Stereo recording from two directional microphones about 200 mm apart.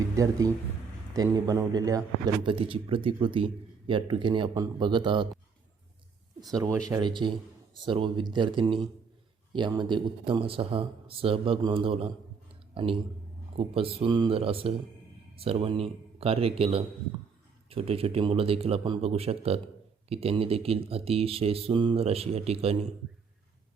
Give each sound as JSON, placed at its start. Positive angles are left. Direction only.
{"t": 0.2, "sound": "a man's voice", "side_deg": -15}
{"t": 6.6, "sound": "a man's voice", "side_deg": -15}